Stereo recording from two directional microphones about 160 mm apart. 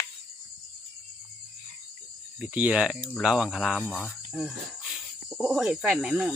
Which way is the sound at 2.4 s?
10° right (ahead or behind).